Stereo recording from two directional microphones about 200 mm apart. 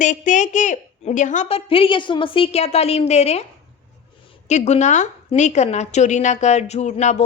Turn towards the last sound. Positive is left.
turn(degrees=35)  # may be behind; listen again after turning